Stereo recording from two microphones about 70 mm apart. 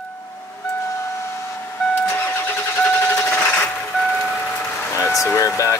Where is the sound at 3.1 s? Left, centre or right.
Left.